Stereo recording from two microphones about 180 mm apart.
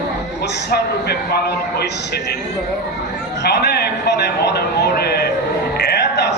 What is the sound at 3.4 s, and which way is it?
A man's voice, 65° left (ahead or behind).